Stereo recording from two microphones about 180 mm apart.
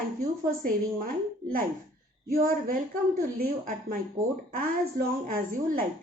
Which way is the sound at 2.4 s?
50° right (ahead or behind).